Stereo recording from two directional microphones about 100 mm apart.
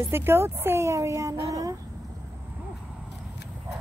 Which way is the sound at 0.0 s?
25° right (ahead or behind).